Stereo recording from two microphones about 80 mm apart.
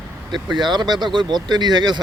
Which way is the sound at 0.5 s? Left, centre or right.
Right.